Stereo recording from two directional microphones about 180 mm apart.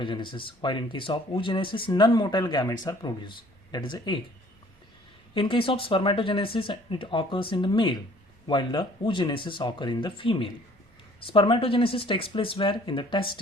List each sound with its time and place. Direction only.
0.0 s speech: 25° left (ahead or behind)
5.3 s speech: 30° left (ahead or behind)